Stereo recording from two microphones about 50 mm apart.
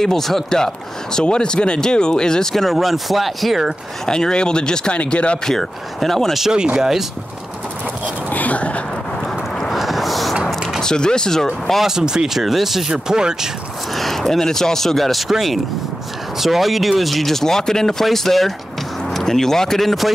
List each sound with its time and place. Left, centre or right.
0.0 s speech: centre
1.1 s speech: centre
2.5 s speech: centre
4.0 s speech: centre
5.4 s speech: centre
6.5 s speech: centre
8.3 s a sound: left
9.7 s boat: centre
10.8 s speech: centre
11.8 s speech: centre
12.9 s speech: centre
13.9 s speech: centre